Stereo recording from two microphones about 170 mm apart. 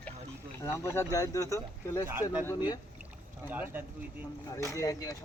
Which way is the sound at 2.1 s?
10° right (ahead or behind).